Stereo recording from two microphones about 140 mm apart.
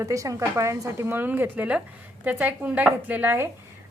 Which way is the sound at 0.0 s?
25° right (ahead or behind).